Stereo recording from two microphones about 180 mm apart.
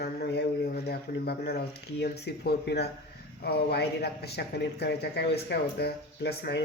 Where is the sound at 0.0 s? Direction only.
60° left (ahead or behind).